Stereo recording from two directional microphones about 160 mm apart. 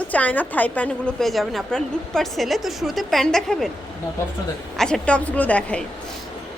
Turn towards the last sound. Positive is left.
turn(degrees=5)  # may be behind; listen again after turning